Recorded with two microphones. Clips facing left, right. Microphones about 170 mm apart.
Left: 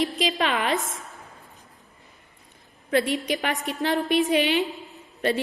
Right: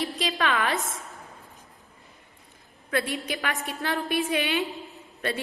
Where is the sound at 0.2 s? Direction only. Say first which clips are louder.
Left 2 dB; 20° left (ahead or behind).